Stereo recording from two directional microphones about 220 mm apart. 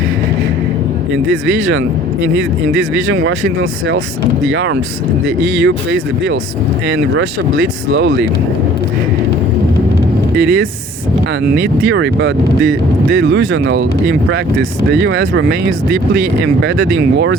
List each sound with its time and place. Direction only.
1.1 s speech: 55° right (ahead or behind)
10.3 s speech: 50° right (ahead or behind)